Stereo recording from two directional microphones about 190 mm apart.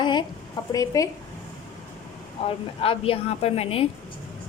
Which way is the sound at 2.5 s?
30° left (ahead or behind).